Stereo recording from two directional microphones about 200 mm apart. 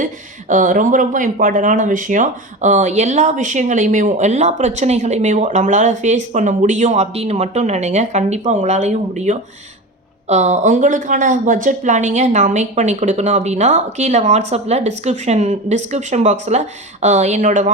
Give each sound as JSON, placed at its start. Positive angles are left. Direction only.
{"t": 0.0, "sound": "speech", "side_deg": -40}